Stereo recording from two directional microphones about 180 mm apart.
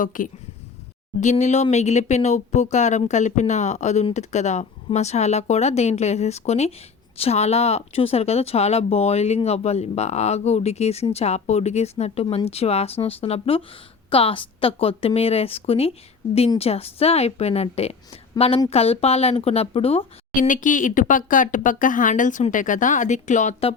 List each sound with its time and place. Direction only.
0.0 s speech: 50° left (ahead or behind); by 20.1 s 30° left (ahead or behind)
20.3 s speech: 45° left (ahead or behind)